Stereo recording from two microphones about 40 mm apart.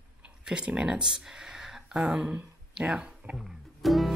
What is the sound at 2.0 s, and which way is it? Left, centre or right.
Speech, right.